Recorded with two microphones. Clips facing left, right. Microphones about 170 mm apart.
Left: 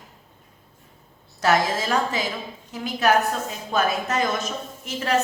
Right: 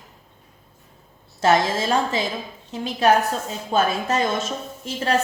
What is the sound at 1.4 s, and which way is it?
A woman's voice, 25° right (ahead or behind).